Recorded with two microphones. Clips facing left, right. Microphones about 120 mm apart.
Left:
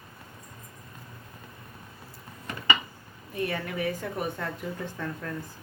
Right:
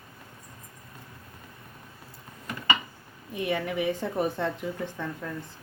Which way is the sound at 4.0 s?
30° right (ahead or behind).